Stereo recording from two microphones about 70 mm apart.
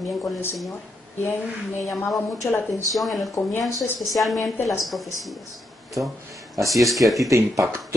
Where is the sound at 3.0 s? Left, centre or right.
Centre.